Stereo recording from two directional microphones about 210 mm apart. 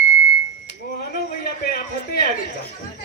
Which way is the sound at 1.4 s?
45° left (ahead or behind).